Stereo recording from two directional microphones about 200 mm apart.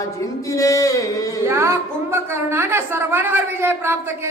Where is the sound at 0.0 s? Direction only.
15° left (ahead or behind).